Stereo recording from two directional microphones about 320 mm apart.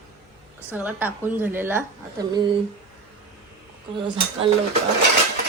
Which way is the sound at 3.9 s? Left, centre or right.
Centre.